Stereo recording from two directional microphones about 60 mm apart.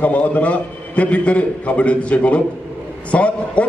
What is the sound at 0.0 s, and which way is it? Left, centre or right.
A man's voice, left.